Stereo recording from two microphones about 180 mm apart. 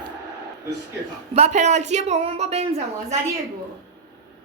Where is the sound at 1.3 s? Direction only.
40° right (ahead or behind).